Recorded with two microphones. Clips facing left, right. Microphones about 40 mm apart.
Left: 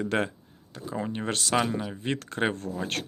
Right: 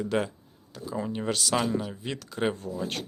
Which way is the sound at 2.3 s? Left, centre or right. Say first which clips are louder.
Even; left.